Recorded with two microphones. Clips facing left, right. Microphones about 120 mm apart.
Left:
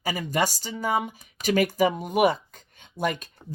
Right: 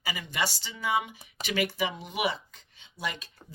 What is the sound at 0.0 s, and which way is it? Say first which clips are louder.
Speech: left 7 dB; 45° left (ahead or behind).